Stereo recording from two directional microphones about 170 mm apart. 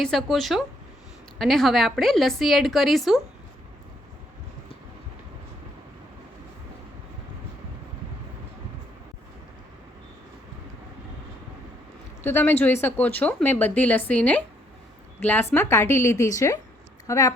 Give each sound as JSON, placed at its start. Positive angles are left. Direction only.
{"t": 0.0, "sound": "a woman's voice", "side_deg": 0}
{"t": 12.2, "sound": "speech", "side_deg": 10}